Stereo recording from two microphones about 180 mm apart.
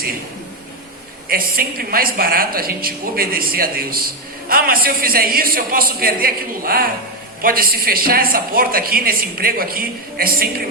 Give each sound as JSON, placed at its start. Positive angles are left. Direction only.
{"t": 1.3, "sound": "a woman's voice", "side_deg": -55}